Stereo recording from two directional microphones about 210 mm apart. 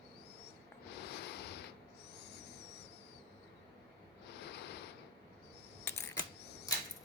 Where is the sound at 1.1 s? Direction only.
50° left (ahead or behind).